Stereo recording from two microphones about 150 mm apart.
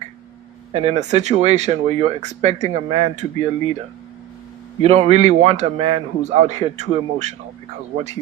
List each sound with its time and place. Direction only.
0.7 s speech: 45° right (ahead or behind)
4.8 s speech: 45° right (ahead or behind)